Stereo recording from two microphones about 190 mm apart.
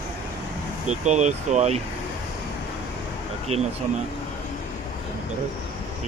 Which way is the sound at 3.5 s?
35° right (ahead or behind).